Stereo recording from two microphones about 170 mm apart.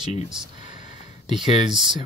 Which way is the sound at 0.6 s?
30° right (ahead or behind).